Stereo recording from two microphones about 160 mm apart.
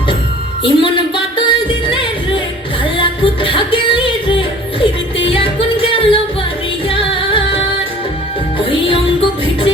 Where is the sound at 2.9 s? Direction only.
35° left (ahead or behind).